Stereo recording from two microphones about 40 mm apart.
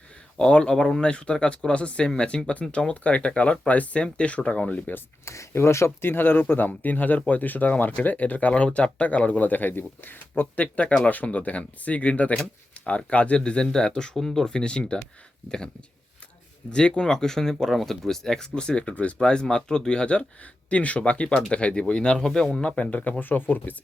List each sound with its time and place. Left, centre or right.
0.3 s speech: left
5.5 s speech: left
13.4 s speech: left
16.7 s speech: left
19.2 s speech: centre; by 23.1 s left
23.2 s speech: left